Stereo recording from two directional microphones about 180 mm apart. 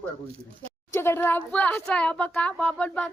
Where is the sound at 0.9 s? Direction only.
15° left (ahead or behind).